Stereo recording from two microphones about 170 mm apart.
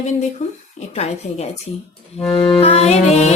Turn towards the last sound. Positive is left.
turn(degrees=40)  # may be behind; listen again after turning